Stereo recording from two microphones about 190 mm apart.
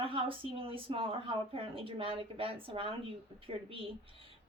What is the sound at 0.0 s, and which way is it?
Speech, 30° right (ahead or behind).